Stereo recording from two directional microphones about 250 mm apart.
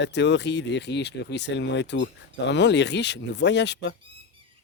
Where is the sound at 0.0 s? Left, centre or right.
Left.